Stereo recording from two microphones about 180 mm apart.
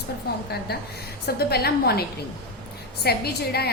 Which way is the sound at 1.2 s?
60° left (ahead or behind).